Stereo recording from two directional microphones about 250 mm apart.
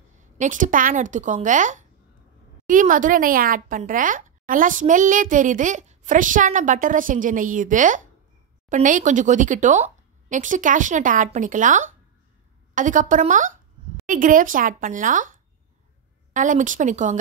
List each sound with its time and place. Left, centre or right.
0.4 s speech: right
16.3 s speech: right